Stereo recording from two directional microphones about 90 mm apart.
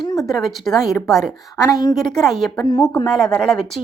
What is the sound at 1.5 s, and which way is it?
Speech, 40° left (ahead or behind).